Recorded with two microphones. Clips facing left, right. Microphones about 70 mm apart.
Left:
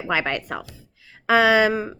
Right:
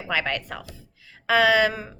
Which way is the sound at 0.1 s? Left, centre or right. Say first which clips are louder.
Left 3 dB; centre.